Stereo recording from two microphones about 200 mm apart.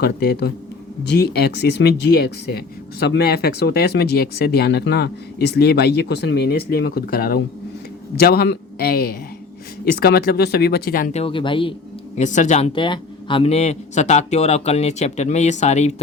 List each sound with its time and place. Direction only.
0.0 s speech: 55° left (ahead or behind); by 11.7 s 25° left (ahead or behind)
12.1 s a man's voice: 35° left (ahead or behind)